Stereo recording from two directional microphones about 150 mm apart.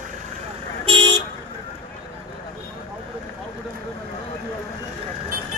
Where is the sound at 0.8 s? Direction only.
30° right (ahead or behind).